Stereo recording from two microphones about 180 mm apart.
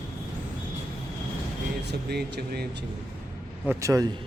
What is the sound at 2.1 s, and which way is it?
Speech, 65° right (ahead or behind).